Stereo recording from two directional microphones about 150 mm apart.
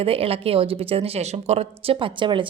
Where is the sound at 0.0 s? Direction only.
40° right (ahead or behind).